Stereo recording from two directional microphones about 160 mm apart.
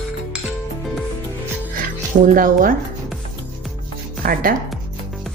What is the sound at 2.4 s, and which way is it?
Speech, 60° right (ahead or behind).